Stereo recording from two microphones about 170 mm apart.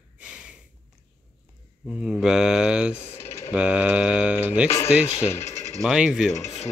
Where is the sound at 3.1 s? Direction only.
15° left (ahead or behind).